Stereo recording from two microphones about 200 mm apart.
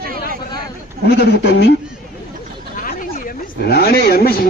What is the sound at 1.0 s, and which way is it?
Speech, 55° left (ahead or behind).